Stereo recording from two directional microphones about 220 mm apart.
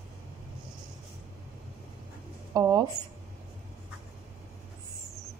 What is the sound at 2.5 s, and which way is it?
Speech, 15° right (ahead or behind).